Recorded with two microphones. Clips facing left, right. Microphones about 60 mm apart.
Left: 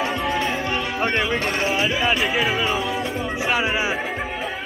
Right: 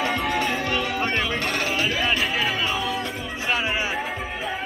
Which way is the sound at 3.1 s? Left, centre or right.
Centre.